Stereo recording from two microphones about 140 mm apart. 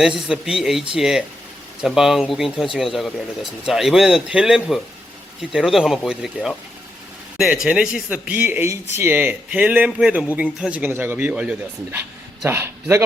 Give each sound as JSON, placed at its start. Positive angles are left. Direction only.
{"t": 0.0, "sound": "speech", "side_deg": -5}